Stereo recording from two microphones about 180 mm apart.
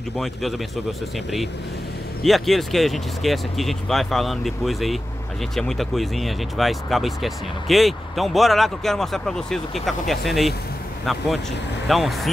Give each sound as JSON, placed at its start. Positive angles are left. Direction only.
{"t": 0.2, "sound": "speech", "side_deg": 0}
{"t": 2.2, "sound": "speech", "side_deg": 0}
{"t": 11.9, "sound": "speech", "side_deg": 0}